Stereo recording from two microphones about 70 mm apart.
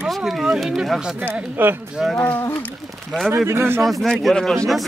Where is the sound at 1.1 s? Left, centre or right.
Right.